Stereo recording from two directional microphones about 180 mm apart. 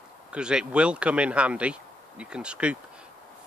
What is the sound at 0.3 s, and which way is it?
Speech, 5° right (ahead or behind).